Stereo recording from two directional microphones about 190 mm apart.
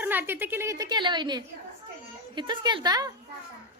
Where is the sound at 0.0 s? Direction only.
10° right (ahead or behind).